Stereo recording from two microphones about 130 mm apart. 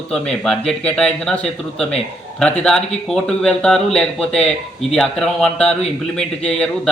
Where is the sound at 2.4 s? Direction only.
5° left (ahead or behind).